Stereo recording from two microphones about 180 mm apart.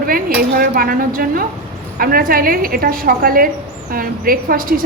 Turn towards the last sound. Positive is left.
turn(degrees=-50)  # may be behind; listen again after turning